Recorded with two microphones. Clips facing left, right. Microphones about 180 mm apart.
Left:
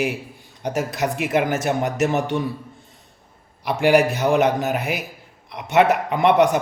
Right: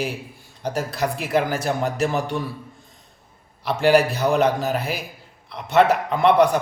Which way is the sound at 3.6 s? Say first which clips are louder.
Left 1 dB; 15° left (ahead or behind).